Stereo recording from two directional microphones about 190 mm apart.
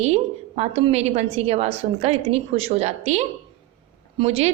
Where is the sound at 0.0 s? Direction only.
35° right (ahead or behind).